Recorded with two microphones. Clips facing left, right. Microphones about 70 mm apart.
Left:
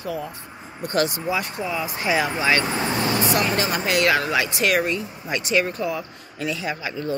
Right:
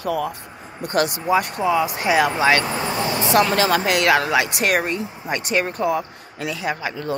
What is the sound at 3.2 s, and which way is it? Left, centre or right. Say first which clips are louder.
Speech: right 9 dB; right.